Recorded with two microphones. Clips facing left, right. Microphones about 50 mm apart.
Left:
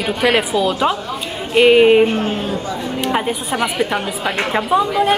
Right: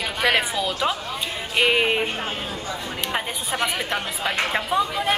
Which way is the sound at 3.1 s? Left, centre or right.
Centre.